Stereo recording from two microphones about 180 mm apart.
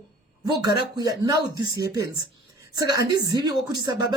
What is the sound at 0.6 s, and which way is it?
Speech, 20° right (ahead or behind).